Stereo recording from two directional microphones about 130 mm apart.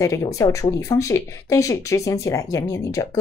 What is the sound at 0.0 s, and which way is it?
A woman's voice, 25° left (ahead or behind).